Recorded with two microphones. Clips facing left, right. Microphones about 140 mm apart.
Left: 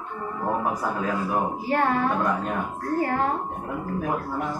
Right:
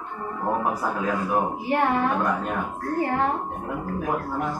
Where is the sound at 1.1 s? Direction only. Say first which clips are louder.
Right 1 dB; 15° right (ahead or behind).